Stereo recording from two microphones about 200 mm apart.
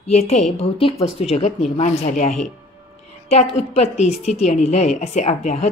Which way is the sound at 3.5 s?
35° left (ahead or behind).